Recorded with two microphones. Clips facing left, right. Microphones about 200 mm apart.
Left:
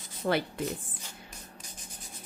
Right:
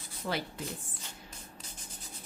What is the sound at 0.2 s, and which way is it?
Speech, 50° left (ahead or behind).